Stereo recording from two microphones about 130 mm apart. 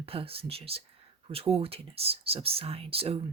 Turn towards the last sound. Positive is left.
turn(degrees=-45)  # may be behind; listen again after turning